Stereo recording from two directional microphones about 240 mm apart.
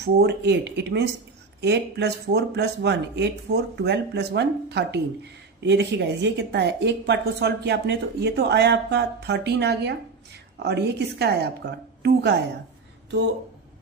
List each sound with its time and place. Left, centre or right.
0.0 s a woman's voice: right